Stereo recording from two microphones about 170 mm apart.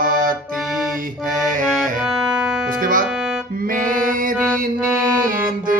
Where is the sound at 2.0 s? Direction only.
5° right (ahead or behind).